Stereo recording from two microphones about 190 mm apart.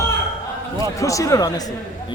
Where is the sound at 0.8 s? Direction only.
15° left (ahead or behind).